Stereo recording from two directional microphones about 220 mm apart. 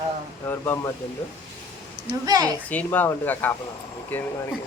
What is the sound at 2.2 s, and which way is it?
Speech, 15° right (ahead or behind).